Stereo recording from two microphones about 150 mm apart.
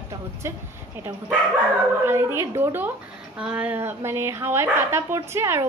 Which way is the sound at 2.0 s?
15° right (ahead or behind).